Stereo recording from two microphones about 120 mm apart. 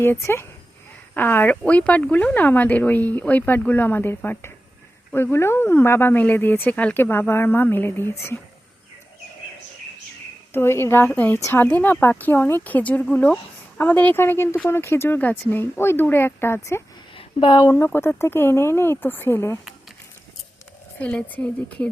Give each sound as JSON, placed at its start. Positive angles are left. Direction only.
{"t": 0.0, "sound": "speech", "side_deg": 20}
{"t": 10.5, "sound": "speech", "side_deg": 20}
{"t": 17.2, "sound": "a sound", "side_deg": 40}
{"t": 17.7, "sound": "speech", "side_deg": 20}
{"t": 21.0, "sound": "speech", "side_deg": 10}